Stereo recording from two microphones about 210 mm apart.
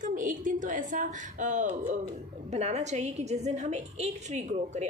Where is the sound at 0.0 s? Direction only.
35° right (ahead or behind).